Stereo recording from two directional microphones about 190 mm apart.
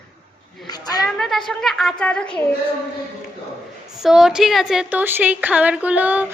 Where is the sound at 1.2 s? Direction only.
Centre (ahead or behind).